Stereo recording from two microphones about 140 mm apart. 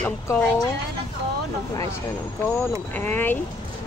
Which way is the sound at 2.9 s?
15° left (ahead or behind).